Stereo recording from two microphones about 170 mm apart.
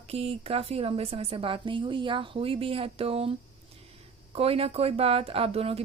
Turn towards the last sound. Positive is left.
turn(degrees=-35)  # may be behind; listen again after turning